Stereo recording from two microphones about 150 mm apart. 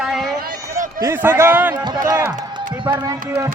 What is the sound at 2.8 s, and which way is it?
Speech, 30° right (ahead or behind).